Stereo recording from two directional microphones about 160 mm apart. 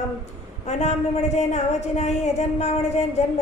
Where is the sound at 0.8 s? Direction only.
45° left (ahead or behind).